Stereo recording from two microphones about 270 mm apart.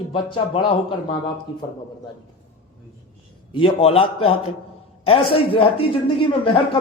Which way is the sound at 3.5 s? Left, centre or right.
Centre.